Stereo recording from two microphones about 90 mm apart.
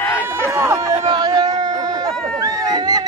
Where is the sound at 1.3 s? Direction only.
50° right (ahead or behind).